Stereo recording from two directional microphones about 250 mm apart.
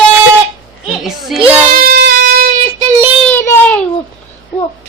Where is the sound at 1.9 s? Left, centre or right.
Right.